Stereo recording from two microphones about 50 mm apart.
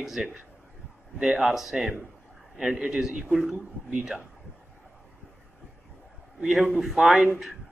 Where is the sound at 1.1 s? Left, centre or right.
Centre.